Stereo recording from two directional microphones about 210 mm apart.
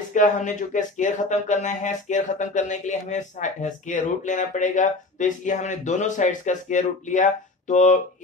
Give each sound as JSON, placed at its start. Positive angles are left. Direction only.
{"t": 0.1, "sound": "speech", "side_deg": 35}